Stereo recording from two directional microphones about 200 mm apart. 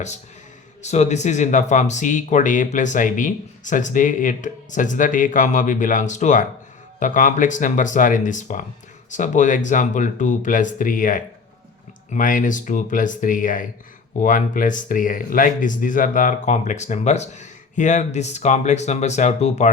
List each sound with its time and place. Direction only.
0.8 s speech: 35° left (ahead or behind)